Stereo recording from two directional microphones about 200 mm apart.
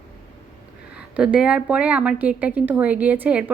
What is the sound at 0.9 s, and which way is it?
A woman's voice, 5° right (ahead or behind).